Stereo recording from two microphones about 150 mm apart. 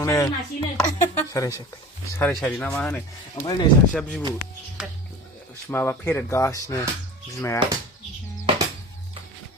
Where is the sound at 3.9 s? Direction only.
5° left (ahead or behind).